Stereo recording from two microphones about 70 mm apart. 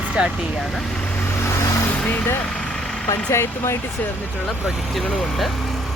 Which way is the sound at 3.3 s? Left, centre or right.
Left.